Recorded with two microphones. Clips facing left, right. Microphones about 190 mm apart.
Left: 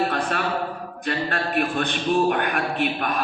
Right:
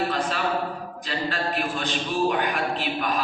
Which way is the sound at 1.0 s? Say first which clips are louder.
Left 3 dB; 60° left (ahead or behind).